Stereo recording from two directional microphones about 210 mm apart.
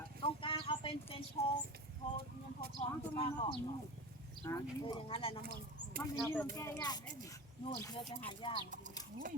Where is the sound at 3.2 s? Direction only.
25° left (ahead or behind).